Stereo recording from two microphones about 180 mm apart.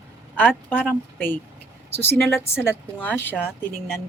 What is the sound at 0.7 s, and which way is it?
Speech, 10° left (ahead or behind).